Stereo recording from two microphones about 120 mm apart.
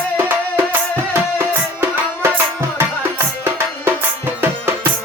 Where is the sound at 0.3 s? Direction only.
15° right (ahead or behind).